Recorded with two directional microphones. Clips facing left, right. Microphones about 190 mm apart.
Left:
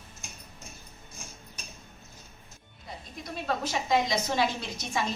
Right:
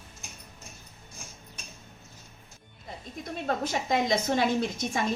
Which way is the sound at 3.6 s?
50° right (ahead or behind).